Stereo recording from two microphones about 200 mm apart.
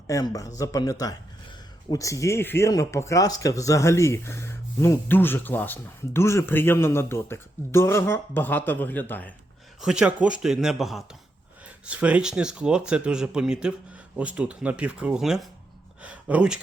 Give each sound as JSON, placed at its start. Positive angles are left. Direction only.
{"t": 0.1, "sound": "speech", "side_deg": 15}
{"t": 9.8, "sound": "speech", "side_deg": -5}